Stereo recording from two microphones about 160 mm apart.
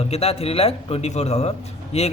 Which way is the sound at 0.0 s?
40° left (ahead or behind).